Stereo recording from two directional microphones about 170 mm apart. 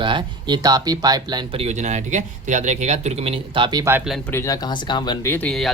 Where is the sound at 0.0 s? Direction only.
30° right (ahead or behind).